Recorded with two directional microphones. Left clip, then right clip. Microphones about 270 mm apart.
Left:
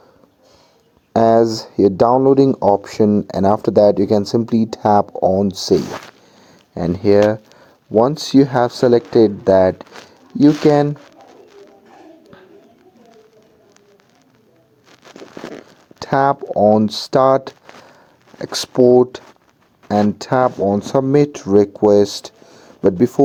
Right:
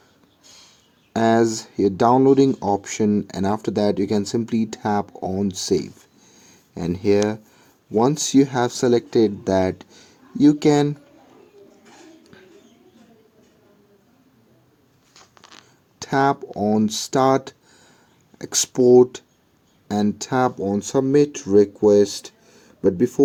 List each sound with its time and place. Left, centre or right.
1.1 s speech: centre
16.0 s speech: centre